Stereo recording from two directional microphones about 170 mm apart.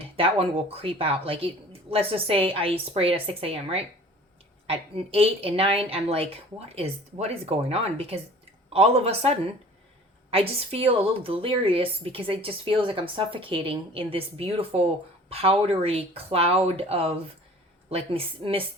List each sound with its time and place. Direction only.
0.0 s a woman's voice: 35° right (ahead or behind)
10.3 s a woman's voice: 35° right (ahead or behind)